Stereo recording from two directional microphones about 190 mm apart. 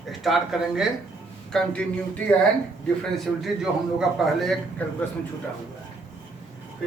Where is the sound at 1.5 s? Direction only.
5° left (ahead or behind).